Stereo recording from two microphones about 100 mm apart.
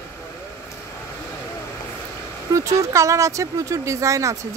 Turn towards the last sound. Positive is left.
turn(degrees=-30)  # may be behind; listen again after turning